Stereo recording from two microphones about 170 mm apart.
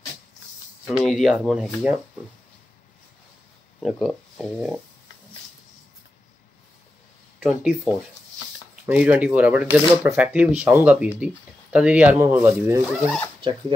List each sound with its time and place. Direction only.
0.8 s speech: centre (ahead or behind)
3.8 s speech: centre (ahead or behind)
7.3 s speech: centre (ahead or behind)
13.4 s speech: 30° right (ahead or behind)